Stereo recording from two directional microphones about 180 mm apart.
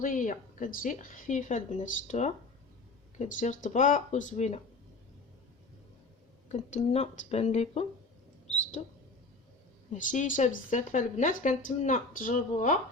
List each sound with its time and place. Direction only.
0.0 s speech: 45° left (ahead or behind)
6.5 s speech: 40° left (ahead or behind)
9.9 s speech: 45° left (ahead or behind)